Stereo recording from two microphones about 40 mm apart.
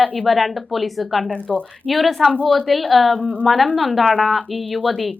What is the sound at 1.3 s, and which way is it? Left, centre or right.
Speech, left.